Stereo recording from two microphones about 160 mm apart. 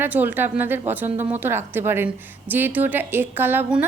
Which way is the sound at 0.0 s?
10° right (ahead or behind).